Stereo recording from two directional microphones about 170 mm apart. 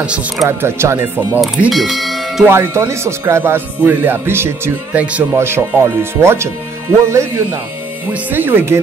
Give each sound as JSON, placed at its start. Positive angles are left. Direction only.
{"t": 0.0, "sound": "speech", "side_deg": -5}
{"t": 1.4, "sound": "speech", "side_deg": 0}
{"t": 2.4, "sound": "speech", "side_deg": -15}